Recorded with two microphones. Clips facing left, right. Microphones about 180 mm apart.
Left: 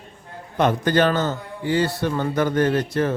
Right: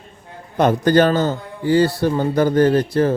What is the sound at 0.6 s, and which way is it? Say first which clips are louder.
Speech: right 4 dB; 40° right (ahead or behind).